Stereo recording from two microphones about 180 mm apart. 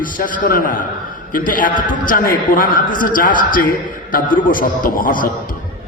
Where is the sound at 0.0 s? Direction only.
50° left (ahead or behind).